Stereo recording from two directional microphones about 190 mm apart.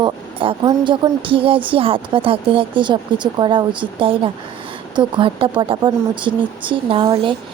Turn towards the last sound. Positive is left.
turn(degrees=-25)  # may be behind; listen again after turning